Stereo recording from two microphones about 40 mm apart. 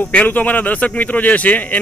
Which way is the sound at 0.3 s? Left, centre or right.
Left.